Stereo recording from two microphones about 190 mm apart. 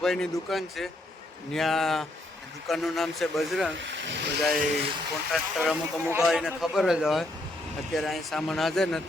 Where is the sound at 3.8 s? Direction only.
70° right (ahead or behind).